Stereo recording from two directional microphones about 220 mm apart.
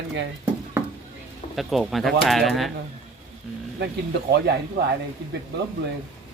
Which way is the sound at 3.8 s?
50° right (ahead or behind).